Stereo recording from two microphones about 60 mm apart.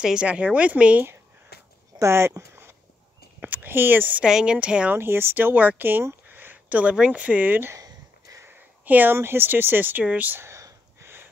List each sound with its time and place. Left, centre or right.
0.0 s speech: centre
2.0 s speech: right
3.3 s speech: right
4.2 s speech: centre
4.9 s speech: right
7.7 s a sound: right
8.5 s a sound: right
9.1 s speech: right
10.5 s whispering: right